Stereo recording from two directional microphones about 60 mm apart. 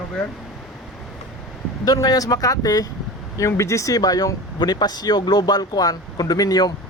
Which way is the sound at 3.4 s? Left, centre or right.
Left.